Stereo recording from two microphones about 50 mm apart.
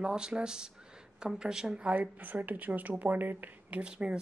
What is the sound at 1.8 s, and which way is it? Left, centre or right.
Speech, right.